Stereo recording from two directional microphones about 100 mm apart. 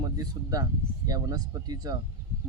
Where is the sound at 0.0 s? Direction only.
40° right (ahead or behind).